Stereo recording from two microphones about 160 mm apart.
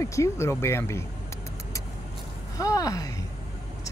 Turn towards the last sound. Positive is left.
turn(degrees=20)  # may be behind; listen again after turning